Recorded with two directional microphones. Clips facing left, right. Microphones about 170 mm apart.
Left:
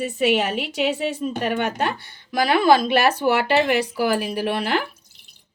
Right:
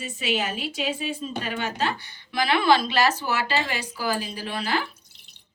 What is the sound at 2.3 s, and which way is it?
A woman's voice, 40° left (ahead or behind).